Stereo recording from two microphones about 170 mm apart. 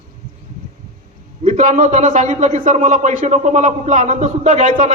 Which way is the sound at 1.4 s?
45° right (ahead or behind).